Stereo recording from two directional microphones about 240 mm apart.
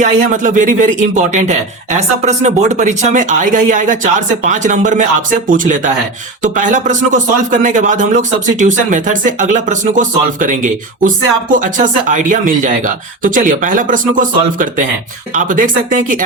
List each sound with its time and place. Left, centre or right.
0.0 s a man's voice: right